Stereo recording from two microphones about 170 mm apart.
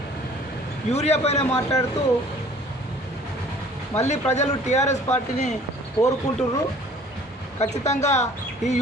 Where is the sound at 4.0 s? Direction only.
40° left (ahead or behind).